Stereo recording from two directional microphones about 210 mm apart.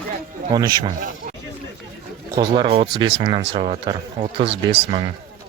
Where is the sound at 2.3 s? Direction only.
20° right (ahead or behind).